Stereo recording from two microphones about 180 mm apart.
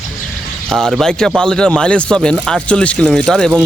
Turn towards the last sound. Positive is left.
turn(degrees=5)  # may be behind; listen again after turning